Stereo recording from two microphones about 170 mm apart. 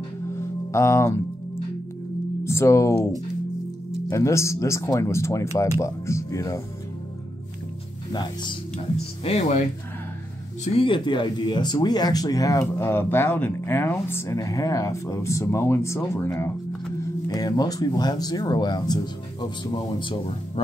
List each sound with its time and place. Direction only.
0.7 s speech: 15° left (ahead or behind)
2.4 s speech: 15° left (ahead or behind)
4.1 s speech: 15° left (ahead or behind)
8.1 s speech: 25° left (ahead or behind)
9.2 s speech: 40° left (ahead or behind)
10.6 s speech: 35° left (ahead or behind)